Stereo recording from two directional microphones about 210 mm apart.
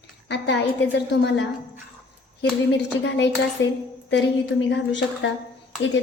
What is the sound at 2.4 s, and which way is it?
A woman's voice, 60° left (ahead or behind).